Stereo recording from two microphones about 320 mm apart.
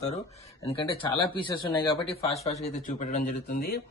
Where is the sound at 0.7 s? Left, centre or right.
Centre.